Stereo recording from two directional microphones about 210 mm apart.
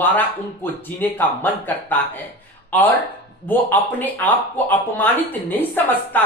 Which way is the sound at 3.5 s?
10° left (ahead or behind).